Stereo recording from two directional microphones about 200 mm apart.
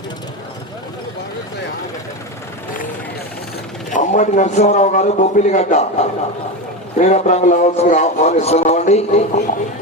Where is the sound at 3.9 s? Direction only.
40° left (ahead or behind).